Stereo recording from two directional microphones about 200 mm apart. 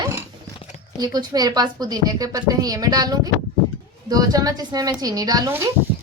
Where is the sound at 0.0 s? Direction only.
15° right (ahead or behind).